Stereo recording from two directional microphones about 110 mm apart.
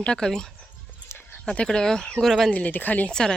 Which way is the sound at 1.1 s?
20° left (ahead or behind).